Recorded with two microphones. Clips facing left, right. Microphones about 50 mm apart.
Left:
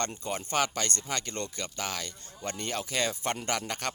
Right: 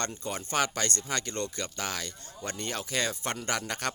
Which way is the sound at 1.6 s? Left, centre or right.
Centre.